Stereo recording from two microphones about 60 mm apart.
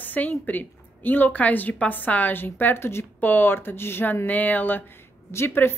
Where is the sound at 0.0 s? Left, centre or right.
Left.